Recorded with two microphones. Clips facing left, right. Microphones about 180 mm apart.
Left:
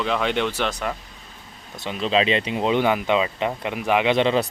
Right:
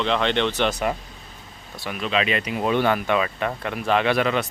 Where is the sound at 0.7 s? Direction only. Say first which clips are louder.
Right 3 dB; 10° right (ahead or behind).